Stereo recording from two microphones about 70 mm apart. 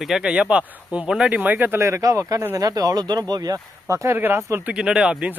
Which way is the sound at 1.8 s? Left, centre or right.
Right.